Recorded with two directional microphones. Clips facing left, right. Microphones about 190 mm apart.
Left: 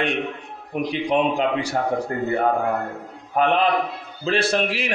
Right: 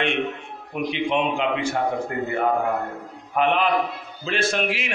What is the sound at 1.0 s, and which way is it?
A man's voice, 40° left (ahead or behind).